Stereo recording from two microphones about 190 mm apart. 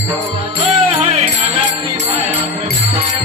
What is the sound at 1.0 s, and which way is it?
Music, 35° right (ahead or behind).